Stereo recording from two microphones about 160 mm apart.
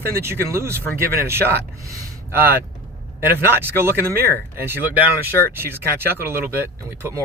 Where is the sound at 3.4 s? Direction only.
15° right (ahead or behind).